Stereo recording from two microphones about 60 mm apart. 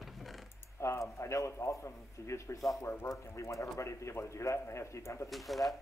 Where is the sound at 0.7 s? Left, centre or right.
Left.